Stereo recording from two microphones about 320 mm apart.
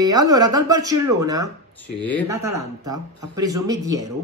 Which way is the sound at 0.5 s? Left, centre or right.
Centre.